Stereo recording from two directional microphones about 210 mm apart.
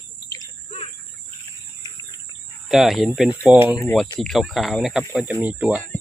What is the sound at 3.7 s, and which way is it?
Speech, 10° left (ahead or behind).